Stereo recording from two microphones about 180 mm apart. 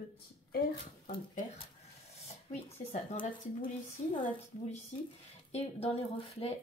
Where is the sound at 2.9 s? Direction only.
30° left (ahead or behind).